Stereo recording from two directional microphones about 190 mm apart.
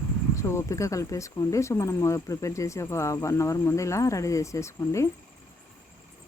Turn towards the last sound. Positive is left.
turn(degrees=15)  # may be behind; listen again after turning